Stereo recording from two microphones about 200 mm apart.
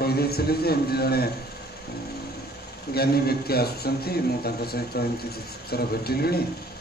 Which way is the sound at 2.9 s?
50° left (ahead or behind).